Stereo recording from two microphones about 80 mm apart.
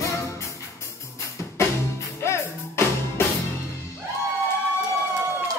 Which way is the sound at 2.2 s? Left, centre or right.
Left.